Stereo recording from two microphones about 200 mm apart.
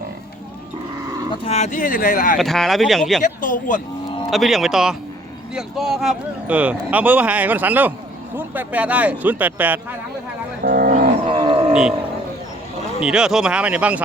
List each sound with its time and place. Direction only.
1.3 s speech: 30° left (ahead or behind)
2.4 s speech: centre (ahead or behind)
3.4 s speech: 40° left (ahead or behind)
4.3 s speech: centre (ahead or behind)
10.6 s speech: 45° right (ahead or behind)
11.2 s wild animals: 25° right (ahead or behind)
11.7 s speech: 5° right (ahead or behind)
13.1 s speech: 5° right (ahead or behind)